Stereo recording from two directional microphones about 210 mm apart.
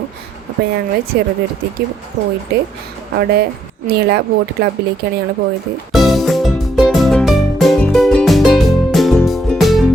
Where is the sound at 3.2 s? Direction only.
50° right (ahead or behind).